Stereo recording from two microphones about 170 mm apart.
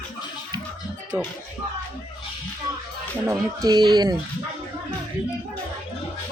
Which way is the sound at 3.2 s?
20° right (ahead or behind).